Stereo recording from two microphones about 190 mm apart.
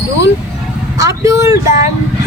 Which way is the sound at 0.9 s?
15° right (ahead or behind).